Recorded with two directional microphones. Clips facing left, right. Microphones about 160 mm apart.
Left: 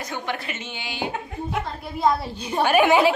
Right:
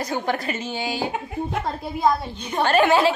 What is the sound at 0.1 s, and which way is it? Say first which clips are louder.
Speech: right 4 dB; 40° right (ahead or behind).